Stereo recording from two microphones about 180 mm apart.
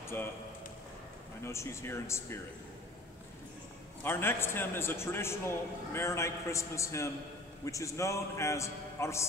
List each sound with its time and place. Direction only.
0.0 s speech: 15° left (ahead or behind)
1.4 s a man's voice: 15° left (ahead or behind)
4.0 s a man's voice: 10° left (ahead or behind)